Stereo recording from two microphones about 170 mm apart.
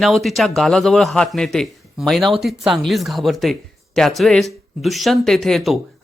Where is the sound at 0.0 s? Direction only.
Centre (ahead or behind).